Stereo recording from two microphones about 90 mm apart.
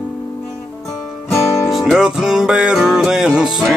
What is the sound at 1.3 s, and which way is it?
Music, centre (ahead or behind).